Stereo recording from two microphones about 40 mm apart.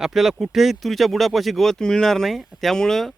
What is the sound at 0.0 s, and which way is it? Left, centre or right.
Speech, centre.